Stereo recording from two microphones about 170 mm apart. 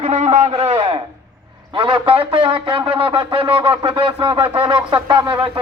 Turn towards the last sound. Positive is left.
turn(degrees=-30)  # may be behind; listen again after turning